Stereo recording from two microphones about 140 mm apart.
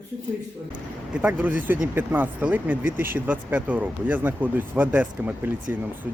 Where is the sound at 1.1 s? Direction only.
10° right (ahead or behind).